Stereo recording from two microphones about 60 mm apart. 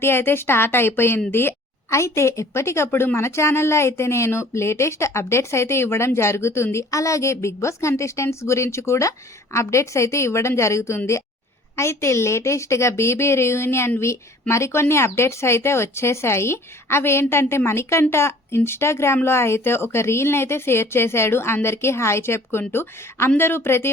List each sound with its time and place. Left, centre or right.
0.0 s speech: left
1.9 s a woman's voice: left